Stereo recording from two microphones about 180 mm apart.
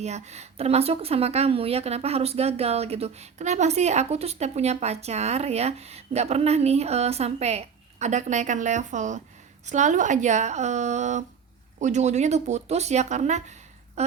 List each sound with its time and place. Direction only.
0.0 s a woman's voice: 40° right (ahead or behind)